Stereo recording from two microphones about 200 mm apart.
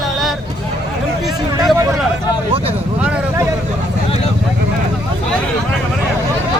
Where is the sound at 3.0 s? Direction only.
5° right (ahead or behind).